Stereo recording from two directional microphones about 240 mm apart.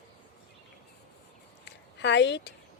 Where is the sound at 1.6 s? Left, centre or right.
Left.